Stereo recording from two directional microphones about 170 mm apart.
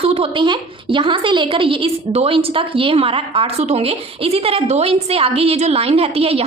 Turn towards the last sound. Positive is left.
turn(degrees=-35)  # may be behind; listen again after turning